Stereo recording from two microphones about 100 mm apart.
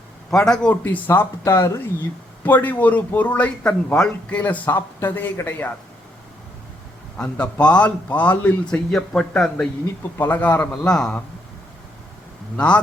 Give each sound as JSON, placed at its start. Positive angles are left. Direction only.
{"t": 0.3, "sound": "a man's voice", "side_deg": 5}
{"t": 7.2, "sound": "a man's voice", "side_deg": 10}
{"t": 10.2, "sound": "a man's voice", "side_deg": 15}
{"t": 12.5, "sound": "a man's voice", "side_deg": 10}